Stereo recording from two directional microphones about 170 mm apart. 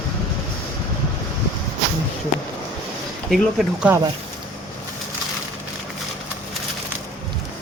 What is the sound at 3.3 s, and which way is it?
Speech, centre (ahead or behind).